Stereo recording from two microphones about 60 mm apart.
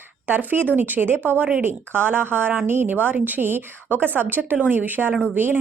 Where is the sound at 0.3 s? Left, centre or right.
Right.